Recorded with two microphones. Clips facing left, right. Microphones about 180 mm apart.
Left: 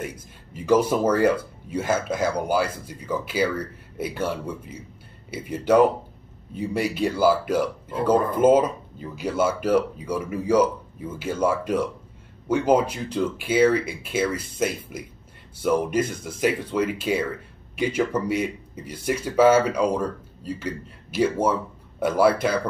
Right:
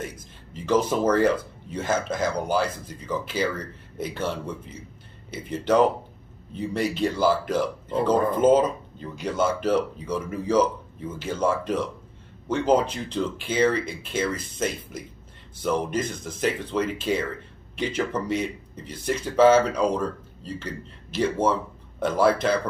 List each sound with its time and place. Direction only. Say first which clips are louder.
0.0 s speech: left 2 dB; 10° left (ahead or behind)